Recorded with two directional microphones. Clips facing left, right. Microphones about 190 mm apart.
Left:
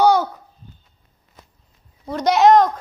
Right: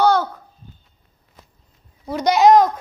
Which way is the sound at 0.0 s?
15° left (ahead or behind).